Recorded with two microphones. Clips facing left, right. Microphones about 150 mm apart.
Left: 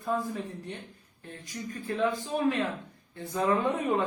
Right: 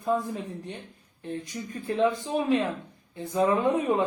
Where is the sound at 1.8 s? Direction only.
20° right (ahead or behind).